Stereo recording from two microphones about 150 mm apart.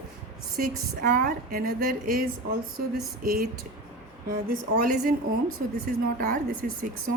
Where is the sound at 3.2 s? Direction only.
85° right.